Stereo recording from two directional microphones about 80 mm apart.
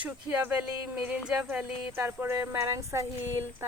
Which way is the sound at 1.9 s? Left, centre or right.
Right.